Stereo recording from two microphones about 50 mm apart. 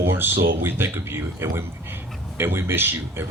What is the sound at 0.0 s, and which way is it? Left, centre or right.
Speech, right.